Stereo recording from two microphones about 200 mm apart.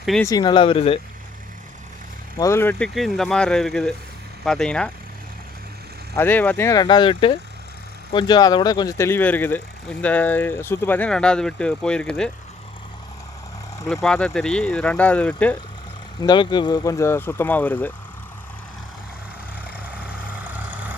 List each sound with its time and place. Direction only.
0.2 s speech: 20° left (ahead or behind)
2.4 s speech: 10° left (ahead or behind)
6.1 s speech: 10° left (ahead or behind)
13.8 s speech: centre (ahead or behind)
16.2 s speech: 20° left (ahead or behind)